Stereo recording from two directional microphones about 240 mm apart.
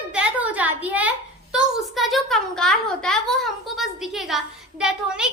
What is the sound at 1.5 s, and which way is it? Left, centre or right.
A child's voice, centre.